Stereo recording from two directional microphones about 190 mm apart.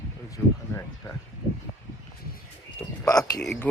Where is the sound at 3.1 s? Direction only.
20° left (ahead or behind).